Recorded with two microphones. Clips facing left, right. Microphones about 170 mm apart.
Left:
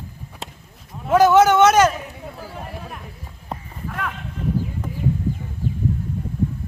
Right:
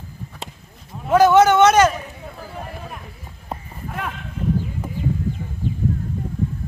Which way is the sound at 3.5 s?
5° right (ahead or behind).